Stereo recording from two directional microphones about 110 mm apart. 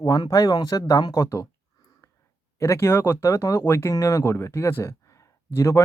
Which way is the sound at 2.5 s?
25° left (ahead or behind).